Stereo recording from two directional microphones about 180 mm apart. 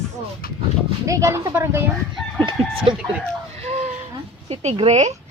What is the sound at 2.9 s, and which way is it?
Speech, 30° right (ahead or behind).